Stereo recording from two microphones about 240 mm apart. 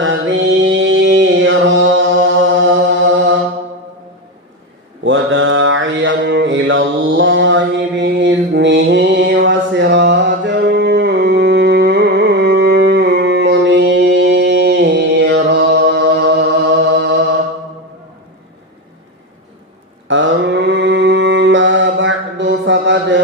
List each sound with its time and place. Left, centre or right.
0.0 s mantra: right
5.0 s mantra: right
20.1 s mantra: right